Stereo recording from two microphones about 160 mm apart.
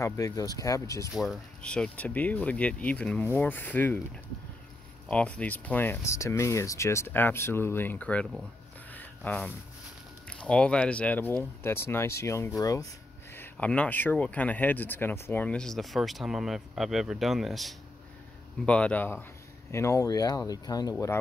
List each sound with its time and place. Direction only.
0.0 s speech: 20° left (ahead or behind)
1.1 s speech: centre (ahead or behind)
5.0 s speech: 10° left (ahead or behind)
8.9 s a sound: 10° left (ahead or behind)
10.2 s speech: 5° left (ahead or behind)